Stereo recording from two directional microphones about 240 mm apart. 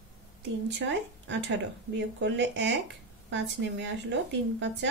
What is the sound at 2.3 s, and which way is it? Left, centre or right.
A woman's voice, right.